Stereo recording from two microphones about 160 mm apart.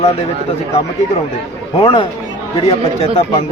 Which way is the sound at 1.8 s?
30° left (ahead or behind).